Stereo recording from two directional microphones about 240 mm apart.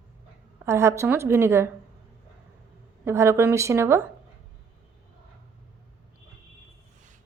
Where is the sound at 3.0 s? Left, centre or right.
Centre.